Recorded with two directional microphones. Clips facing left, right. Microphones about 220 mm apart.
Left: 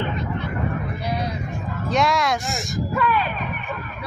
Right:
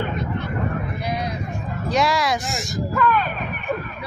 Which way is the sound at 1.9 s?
Centre (ahead or behind).